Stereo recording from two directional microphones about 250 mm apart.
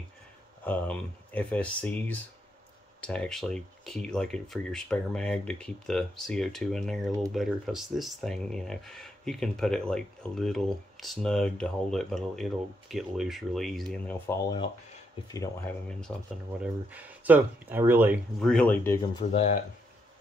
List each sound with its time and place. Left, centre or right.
0.7 s speech: centre
19.1 s speech: left